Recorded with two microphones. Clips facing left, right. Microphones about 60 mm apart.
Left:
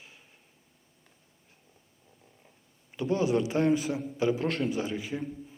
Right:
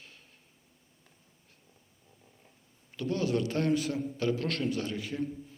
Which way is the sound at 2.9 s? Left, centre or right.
Centre.